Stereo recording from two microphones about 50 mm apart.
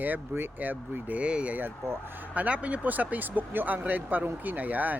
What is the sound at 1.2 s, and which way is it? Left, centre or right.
Speech, right.